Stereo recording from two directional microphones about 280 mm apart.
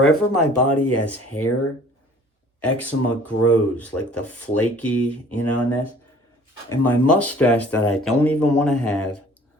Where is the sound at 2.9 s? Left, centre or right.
Left.